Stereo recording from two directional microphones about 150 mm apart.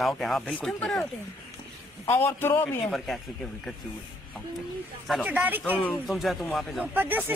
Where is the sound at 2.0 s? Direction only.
15° left (ahead or behind).